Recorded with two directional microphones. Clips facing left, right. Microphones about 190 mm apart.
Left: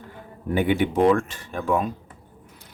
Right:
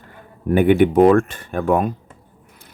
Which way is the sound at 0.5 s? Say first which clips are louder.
Right 8 dB; 55° right (ahead or behind).